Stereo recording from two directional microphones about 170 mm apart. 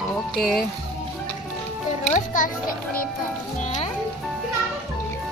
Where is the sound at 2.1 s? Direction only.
50° left (ahead or behind).